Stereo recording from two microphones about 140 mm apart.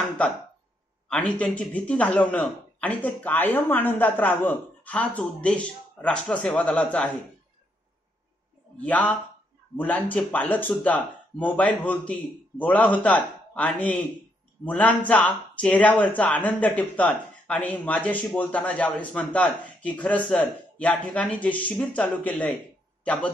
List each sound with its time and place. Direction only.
1.0 s a sound: 5° left (ahead or behind)
1.4 s speech: 10° left (ahead or behind)
8.7 s a man's voice: 10° left (ahead or behind)